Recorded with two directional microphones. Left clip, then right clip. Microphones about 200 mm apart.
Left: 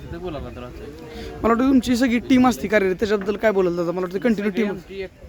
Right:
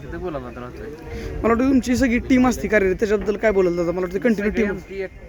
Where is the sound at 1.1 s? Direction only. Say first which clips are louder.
Even; 10° left (ahead or behind).